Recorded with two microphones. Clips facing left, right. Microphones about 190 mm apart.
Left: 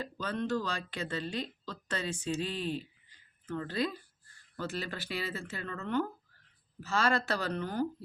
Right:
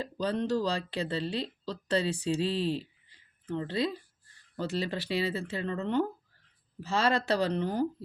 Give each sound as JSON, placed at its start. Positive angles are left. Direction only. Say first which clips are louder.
{"t": 0.0, "sound": "speech", "louder": "right 4 dB", "side_deg": -35}
{"t": 6.7, "sound": "speech", "louder": "right 2 dB", "side_deg": -30}